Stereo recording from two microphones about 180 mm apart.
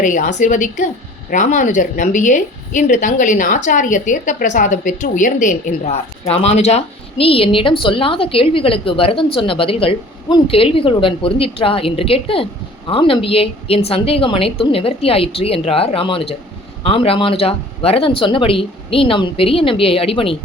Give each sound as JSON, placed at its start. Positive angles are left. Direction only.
{"t": 0.0, "sound": "a woman's voice", "side_deg": 45}